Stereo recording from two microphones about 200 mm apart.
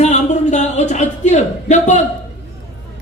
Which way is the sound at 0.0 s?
35° left (ahead or behind).